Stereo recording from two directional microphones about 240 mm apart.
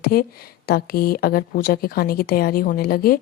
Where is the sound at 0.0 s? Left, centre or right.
Left.